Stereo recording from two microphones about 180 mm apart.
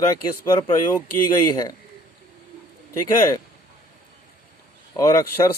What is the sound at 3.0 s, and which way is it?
Speech, 20° left (ahead or behind).